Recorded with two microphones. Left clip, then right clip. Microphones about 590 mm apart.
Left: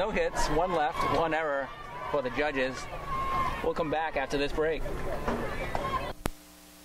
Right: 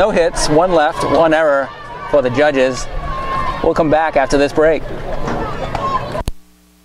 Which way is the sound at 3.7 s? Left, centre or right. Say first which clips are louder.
Right 17 dB; right.